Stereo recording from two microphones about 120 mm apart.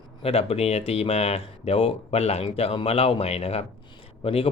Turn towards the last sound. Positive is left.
turn(degrees=50)  # may be behind; listen again after turning